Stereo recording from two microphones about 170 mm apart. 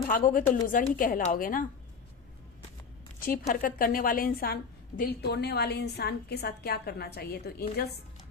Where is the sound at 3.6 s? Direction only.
55° left (ahead or behind).